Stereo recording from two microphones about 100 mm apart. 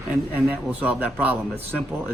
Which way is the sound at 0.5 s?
15° right (ahead or behind).